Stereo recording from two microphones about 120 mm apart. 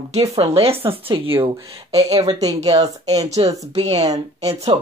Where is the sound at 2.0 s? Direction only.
30° right (ahead or behind).